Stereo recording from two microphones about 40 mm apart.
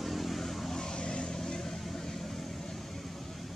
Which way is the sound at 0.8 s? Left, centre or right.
Centre.